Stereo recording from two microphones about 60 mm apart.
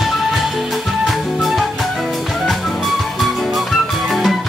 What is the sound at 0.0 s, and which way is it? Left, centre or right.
Music, centre.